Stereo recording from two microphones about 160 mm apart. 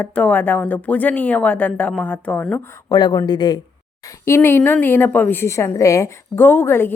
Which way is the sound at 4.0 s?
15° left (ahead or behind).